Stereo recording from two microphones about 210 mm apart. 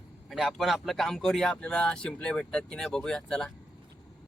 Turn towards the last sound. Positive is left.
turn(degrees=5)  # may be behind; listen again after turning